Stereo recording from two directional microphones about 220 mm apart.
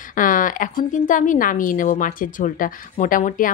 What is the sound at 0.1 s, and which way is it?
A woman's voice, 40° left (ahead or behind).